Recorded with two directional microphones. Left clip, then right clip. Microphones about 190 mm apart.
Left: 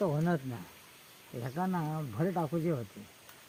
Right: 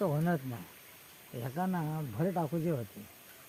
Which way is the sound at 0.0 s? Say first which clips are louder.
Left 1 dB; 20° right (ahead or behind).